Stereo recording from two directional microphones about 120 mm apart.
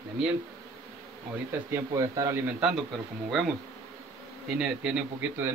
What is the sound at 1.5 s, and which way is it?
Speech, 25° right (ahead or behind).